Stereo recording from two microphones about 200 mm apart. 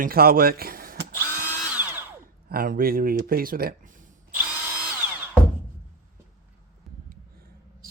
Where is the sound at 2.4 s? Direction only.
45° right (ahead or behind).